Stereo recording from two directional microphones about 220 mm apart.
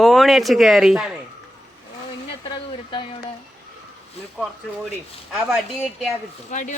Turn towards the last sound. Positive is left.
turn(degrees=35)  # may be behind; listen again after turning